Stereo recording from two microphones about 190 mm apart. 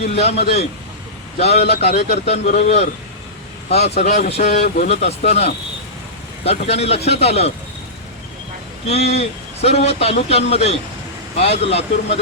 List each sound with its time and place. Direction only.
0.1 s a man's voice: 35° left (ahead or behind)
8.9 s a man's voice: 35° left (ahead or behind)